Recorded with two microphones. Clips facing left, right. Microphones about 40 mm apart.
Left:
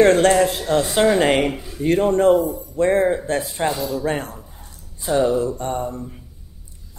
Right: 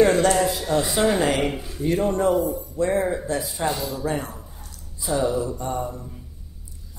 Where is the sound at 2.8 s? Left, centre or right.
Left.